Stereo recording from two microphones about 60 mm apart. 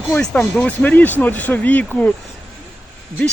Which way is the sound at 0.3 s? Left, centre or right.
Left.